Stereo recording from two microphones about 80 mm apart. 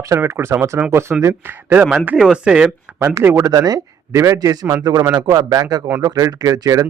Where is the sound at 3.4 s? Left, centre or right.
Right.